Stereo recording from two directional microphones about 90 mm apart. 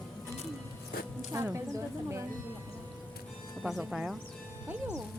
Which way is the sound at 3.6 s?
5° right (ahead or behind).